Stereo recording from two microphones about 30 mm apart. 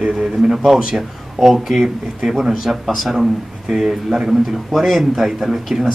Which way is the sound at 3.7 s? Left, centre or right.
Centre.